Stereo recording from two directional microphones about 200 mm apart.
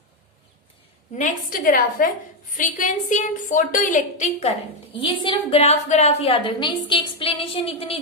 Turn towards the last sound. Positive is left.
turn(degrees=30)  # may be behind; listen again after turning